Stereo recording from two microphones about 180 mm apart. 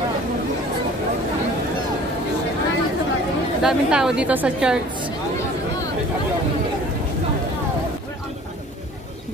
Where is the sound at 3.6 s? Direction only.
5° right (ahead or behind).